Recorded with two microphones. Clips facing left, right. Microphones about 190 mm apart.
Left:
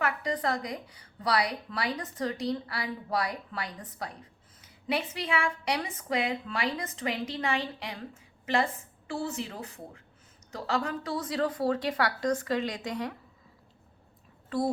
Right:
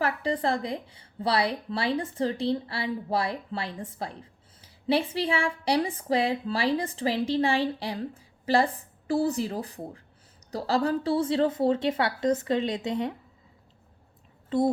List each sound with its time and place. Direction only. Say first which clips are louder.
0.0 s a woman's voice: right 3 dB; 30° right (ahead or behind)
14.5 s a woman's voice: right 5 dB; 20° right (ahead or behind)